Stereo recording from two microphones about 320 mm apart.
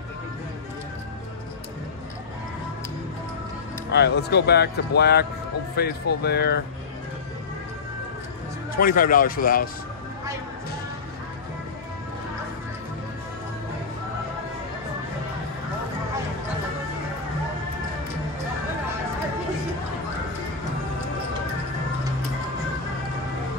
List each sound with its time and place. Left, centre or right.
3.9 s speech: left
8.7 s speech: left